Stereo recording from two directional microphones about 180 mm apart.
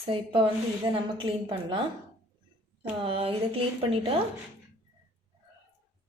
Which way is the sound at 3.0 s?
30° right (ahead or behind).